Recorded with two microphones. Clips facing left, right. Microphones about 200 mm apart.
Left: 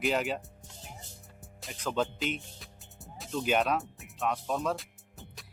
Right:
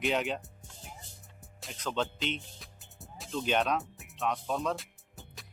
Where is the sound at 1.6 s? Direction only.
5° left (ahead or behind).